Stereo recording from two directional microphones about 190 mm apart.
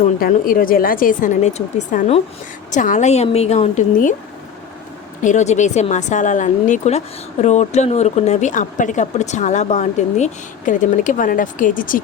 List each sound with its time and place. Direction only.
0.2 s speech: 50° left (ahead or behind)
5.2 s speech: 40° left (ahead or behind)